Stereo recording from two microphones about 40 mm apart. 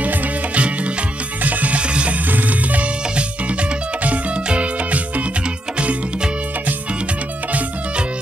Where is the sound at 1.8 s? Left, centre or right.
Right.